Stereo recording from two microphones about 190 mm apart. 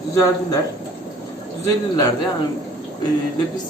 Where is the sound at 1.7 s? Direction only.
20° left (ahead or behind).